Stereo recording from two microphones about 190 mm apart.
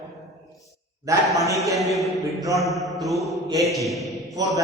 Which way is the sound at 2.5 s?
Centre (ahead or behind).